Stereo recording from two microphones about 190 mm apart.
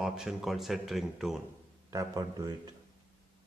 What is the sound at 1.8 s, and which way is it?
Speech, 20° right (ahead or behind).